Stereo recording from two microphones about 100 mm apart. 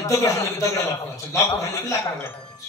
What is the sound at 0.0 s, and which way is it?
A man's voice, 30° left (ahead or behind).